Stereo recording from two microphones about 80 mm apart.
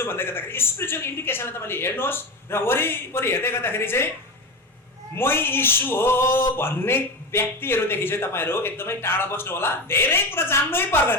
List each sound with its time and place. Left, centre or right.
0.0 s speech: left
5.1 s speech: left